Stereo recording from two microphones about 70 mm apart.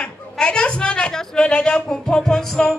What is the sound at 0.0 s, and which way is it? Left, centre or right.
Speech, centre.